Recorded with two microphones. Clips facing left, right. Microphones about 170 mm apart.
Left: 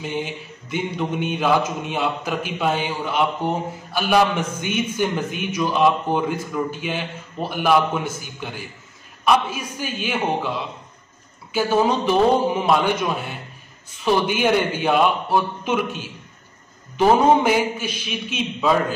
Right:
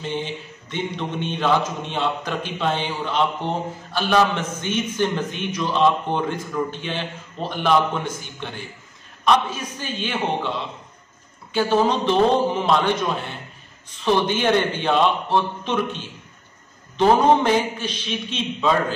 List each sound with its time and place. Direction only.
0.0 s mantra: 10° left (ahead or behind)